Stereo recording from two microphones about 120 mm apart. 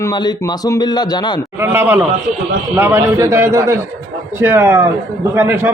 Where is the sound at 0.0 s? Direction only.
35° left (ahead or behind).